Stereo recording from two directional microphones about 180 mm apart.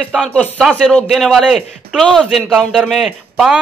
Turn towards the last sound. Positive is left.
turn(degrees=0)  # may be behind; listen again after turning